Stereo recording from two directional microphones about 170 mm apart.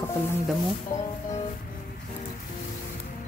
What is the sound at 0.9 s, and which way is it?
Speech, 50° left (ahead or behind).